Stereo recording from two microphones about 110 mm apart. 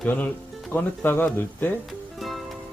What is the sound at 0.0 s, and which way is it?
Speech, 15° left (ahead or behind).